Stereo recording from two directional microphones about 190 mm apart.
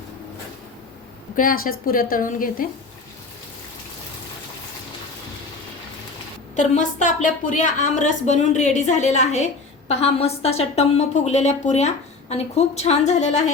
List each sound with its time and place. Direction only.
1.4 s a woman's voice: 50° left (ahead or behind)
6.6 s speech: 40° left (ahead or behind)